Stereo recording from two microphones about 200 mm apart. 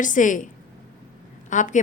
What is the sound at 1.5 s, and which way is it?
Speech, 40° left (ahead or behind).